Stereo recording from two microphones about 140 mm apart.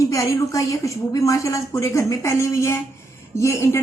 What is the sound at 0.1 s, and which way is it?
A woman's voice, 20° left (ahead or behind).